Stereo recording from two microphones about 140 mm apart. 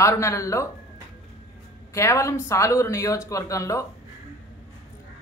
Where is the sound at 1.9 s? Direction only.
20° left (ahead or behind).